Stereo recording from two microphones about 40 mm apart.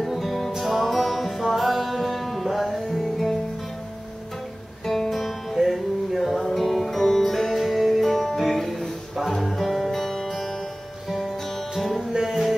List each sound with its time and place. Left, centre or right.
0.0 s music: centre
4.8 s music: centre
12.1 s music: centre